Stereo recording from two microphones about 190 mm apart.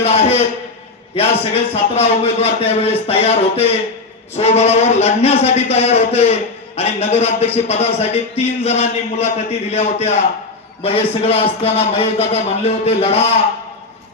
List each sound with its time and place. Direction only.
0.0 s speech: 35° left (ahead or behind)